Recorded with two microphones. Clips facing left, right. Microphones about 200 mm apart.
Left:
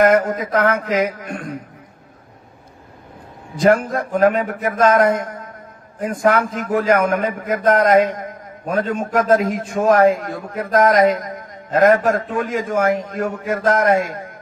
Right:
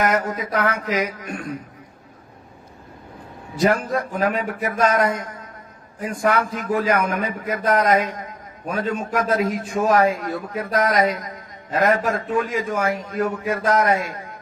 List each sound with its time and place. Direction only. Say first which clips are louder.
0.0 s a man's voice: left 7 dB; 50° left (ahead or behind)
3.6 s a man's voice: left 4 dB; 50° left (ahead or behind)